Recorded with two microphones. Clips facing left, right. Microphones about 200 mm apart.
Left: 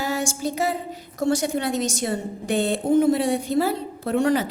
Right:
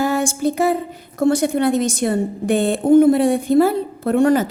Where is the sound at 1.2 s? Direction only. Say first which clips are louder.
Right 6 dB; 55° right (ahead or behind).